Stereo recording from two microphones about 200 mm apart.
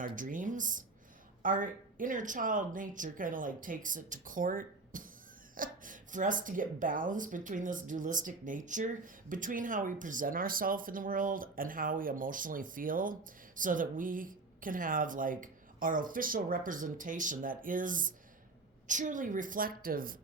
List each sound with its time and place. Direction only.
0.0 s speech: 40° right (ahead or behind)